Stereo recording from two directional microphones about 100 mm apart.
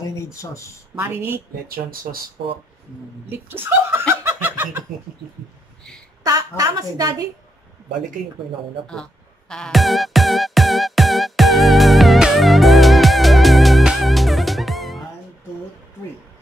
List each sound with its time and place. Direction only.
0.0 s speech: 30° left (ahead or behind)
0.9 s speech: 20° right (ahead or behind)
3.3 s speech: 20° right (ahead or behind)
4.1 s snicker: 25° right (ahead or behind)
6.2 s a woman's voice: 35° right (ahead or behind)
8.8 s music: 10° left (ahead or behind)